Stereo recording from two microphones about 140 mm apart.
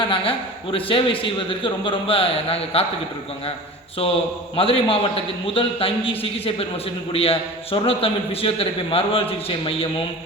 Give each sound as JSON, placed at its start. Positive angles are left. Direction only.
{"t": 0.0, "sound": "a man's voice", "side_deg": 40}
{"t": 4.0, "sound": "a man's voice", "side_deg": 40}